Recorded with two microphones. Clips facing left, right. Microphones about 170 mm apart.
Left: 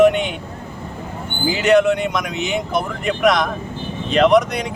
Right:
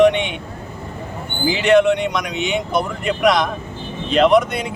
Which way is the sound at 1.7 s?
Centre (ahead or behind).